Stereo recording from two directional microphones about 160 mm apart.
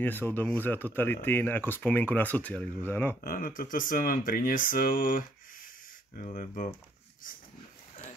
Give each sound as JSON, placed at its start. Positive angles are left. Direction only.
{"t": 0.0, "sound": "speech", "side_deg": 10}
{"t": 3.2, "sound": "speech", "side_deg": 60}
{"t": 6.2, "sound": "speech", "side_deg": 50}